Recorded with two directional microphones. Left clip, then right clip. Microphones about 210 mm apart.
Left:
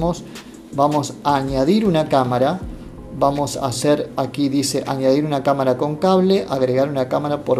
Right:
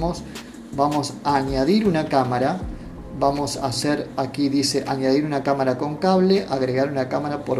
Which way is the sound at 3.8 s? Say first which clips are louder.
Left 8 dB; 35° left (ahead or behind).